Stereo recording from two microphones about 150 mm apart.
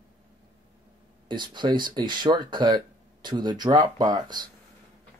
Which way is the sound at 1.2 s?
30° right (ahead or behind).